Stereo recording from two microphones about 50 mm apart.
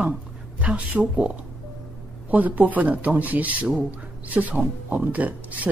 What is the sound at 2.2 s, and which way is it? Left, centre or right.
Speech, right.